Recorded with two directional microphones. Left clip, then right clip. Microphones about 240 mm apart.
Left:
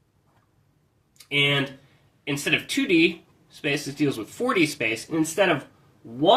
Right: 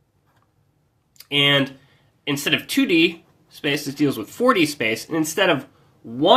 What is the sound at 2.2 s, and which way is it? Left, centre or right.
Speech, right.